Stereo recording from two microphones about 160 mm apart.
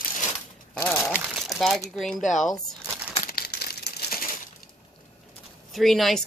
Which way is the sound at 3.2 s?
70° left (ahead or behind).